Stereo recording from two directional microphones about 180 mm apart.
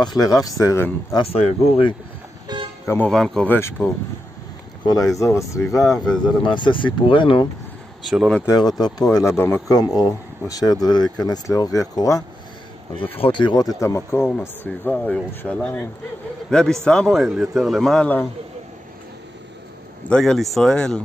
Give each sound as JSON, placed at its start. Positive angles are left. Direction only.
{"t": 0.0, "sound": "speech", "side_deg": 20}
{"t": 1.1, "sound": "speech", "side_deg": 30}
{"t": 2.4, "sound": "vehicle", "side_deg": -25}
{"t": 2.9, "sound": "speech", "side_deg": 5}
{"t": 3.5, "sound": "speech", "side_deg": 15}
{"t": 6.0, "sound": "a man's voice", "side_deg": 5}
{"t": 6.4, "sound": "speech", "side_deg": 25}
{"t": 8.1, "sound": "a man's voice", "side_deg": 0}
{"t": 8.4, "sound": "speech", "side_deg": 20}
{"t": 13.1, "sound": "speech", "side_deg": 30}
{"t": 13.7, "sound": "a man's voice", "side_deg": 15}
{"t": 20.1, "sound": "a man's voice", "side_deg": 5}